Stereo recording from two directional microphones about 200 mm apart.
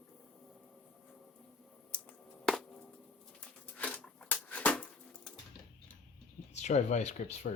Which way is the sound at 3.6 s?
5° left (ahead or behind).